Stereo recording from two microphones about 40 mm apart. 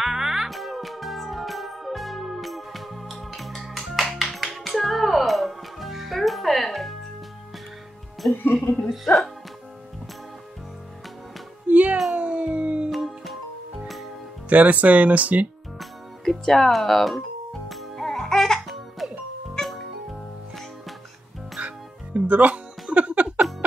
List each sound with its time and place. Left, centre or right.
0.0 s music: centre
0.5 s music: centre
8.2 s speech: left
8.8 s speech: centre
11.7 s music: right
12.2 s a sound: right
12.9 s music: centre
14.5 s speech: right
15.8 s music: centre
21.6 s music: right